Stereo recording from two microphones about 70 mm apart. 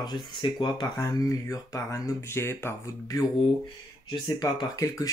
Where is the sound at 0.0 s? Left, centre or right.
Left.